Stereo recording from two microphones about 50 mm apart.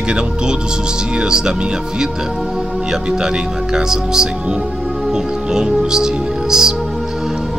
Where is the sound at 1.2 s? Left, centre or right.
Centre.